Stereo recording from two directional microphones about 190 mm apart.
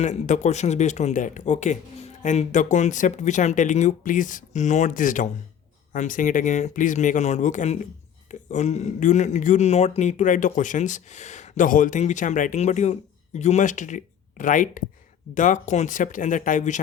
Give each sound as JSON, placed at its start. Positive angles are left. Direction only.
{"t": 0.0, "sound": "speech", "side_deg": 40}